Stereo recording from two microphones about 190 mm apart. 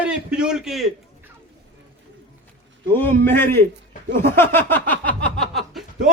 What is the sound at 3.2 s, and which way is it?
A man's voice, 10° left (ahead or behind).